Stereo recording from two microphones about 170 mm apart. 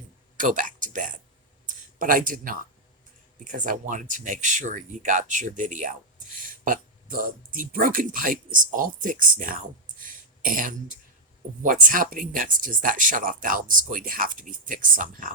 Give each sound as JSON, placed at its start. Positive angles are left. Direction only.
{"t": 0.3, "sound": "speech", "side_deg": -50}